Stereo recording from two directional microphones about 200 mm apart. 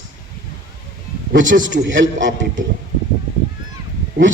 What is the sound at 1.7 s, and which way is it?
Speech, 70° right (ahead or behind).